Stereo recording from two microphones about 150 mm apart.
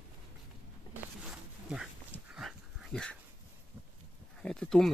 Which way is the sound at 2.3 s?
Centre (ahead or behind).